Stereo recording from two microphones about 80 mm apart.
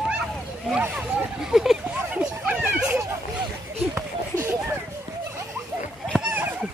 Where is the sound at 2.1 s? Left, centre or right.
Centre.